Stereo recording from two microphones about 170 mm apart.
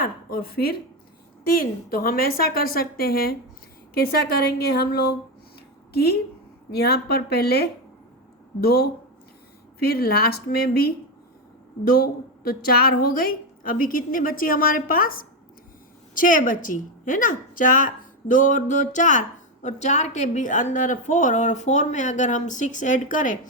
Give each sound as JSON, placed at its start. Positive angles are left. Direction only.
{"t": 0.0, "sound": "a woman's voice", "side_deg": 60}